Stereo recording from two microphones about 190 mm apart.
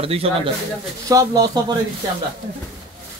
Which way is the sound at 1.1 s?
20° right (ahead or behind).